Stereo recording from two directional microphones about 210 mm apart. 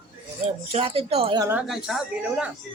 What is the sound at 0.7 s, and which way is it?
Speech, 25° right (ahead or behind).